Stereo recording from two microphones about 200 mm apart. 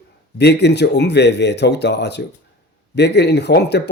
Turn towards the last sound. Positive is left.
turn(degrees=55)  # may be behind; listen again after turning